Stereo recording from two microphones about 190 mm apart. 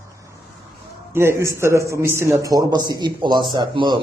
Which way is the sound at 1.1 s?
15° right (ahead or behind).